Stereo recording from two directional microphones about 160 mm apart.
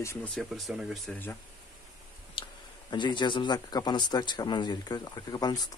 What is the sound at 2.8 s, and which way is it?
Speech, 30° left (ahead or behind).